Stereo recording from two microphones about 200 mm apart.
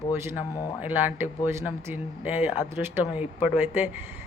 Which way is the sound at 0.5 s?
15° left (ahead or behind).